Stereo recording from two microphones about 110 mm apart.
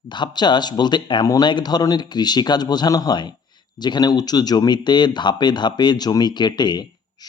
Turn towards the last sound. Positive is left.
turn(degrees=40)  # may be behind; listen again after turning